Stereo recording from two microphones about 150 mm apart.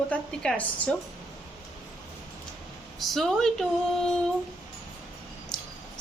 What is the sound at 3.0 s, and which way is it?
Speech, centre (ahead or behind).